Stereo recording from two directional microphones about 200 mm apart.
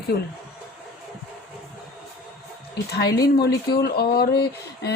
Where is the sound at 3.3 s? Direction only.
50° left (ahead or behind).